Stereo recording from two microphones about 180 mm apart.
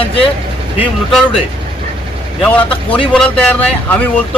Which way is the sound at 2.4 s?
10° left (ahead or behind).